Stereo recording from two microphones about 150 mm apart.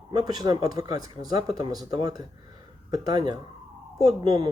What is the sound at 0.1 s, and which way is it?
Speech, 25° right (ahead or behind).